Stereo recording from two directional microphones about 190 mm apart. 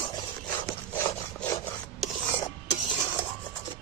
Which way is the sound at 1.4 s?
15° left (ahead or behind).